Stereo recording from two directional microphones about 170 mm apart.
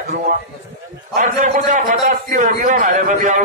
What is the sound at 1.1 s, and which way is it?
A man's voice, 50° right (ahead or behind).